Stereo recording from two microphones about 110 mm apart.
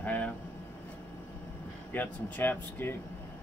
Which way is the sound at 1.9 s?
15° left (ahead or behind).